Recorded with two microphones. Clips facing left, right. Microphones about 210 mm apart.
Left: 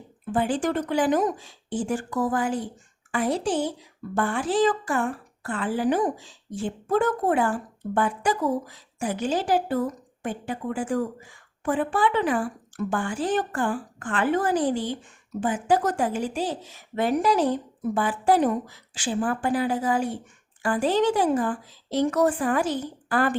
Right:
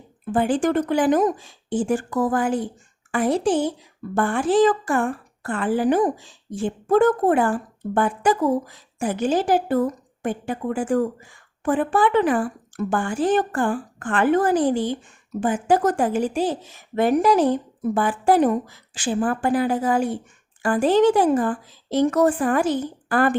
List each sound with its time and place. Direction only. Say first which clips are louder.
0.3 s a woman's voice: right 4 dB; 50° right (ahead or behind)